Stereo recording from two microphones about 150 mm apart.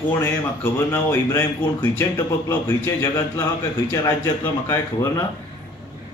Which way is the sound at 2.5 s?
20° left (ahead or behind).